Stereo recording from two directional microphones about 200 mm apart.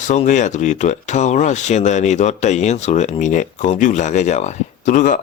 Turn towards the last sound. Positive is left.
turn(degrees=40)  # may be behind; listen again after turning